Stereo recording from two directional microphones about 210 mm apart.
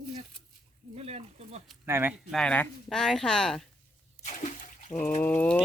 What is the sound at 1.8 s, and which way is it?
Speech, 10° right (ahead or behind).